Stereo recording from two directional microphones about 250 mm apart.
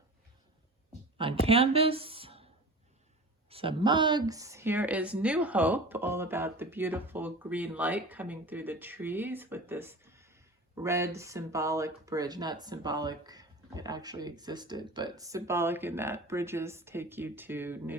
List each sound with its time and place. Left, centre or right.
1.2 s speech: right
3.5 s speech: right